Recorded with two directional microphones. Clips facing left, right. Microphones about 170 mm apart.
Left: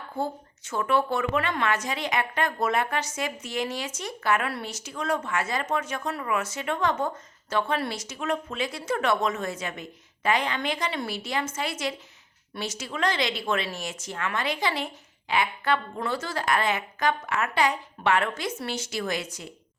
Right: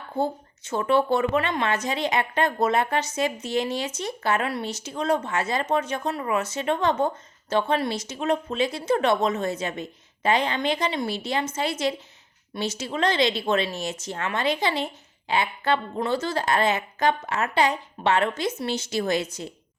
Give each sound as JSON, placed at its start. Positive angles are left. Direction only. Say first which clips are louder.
{"t": 0.7, "sound": "a woman's voice", "louder": "right 4 dB", "side_deg": -25}